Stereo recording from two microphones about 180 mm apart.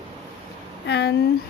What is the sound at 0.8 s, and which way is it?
Speech, 70° left (ahead or behind).